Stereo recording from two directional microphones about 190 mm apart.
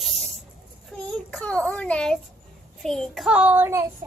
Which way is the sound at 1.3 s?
5° left (ahead or behind).